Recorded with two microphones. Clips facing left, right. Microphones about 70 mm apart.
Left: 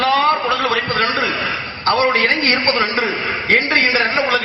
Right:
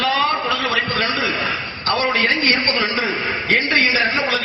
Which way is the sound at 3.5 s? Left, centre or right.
Left.